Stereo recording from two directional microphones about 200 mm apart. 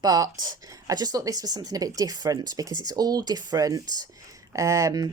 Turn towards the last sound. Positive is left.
turn(degrees=-15)  # may be behind; listen again after turning